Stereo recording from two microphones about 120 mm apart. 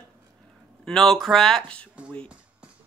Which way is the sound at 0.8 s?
5° left (ahead or behind).